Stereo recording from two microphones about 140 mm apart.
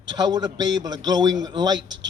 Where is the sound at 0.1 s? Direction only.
30° right (ahead or behind).